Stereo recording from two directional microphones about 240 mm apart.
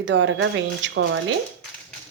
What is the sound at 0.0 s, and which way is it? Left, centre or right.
A woman's voice, right.